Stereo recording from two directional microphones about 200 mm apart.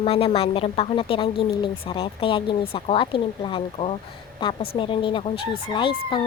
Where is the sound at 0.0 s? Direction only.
30° left (ahead or behind).